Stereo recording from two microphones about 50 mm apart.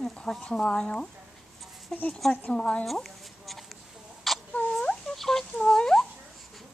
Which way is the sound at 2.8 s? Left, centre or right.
Centre.